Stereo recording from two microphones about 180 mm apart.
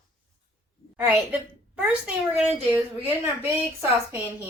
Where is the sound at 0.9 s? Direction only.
10° right (ahead or behind).